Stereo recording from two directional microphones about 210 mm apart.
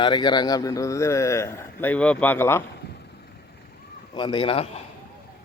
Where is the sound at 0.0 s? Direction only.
20° left (ahead or behind).